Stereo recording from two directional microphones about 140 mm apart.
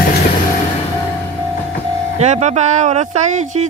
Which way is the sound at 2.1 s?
55° right (ahead or behind).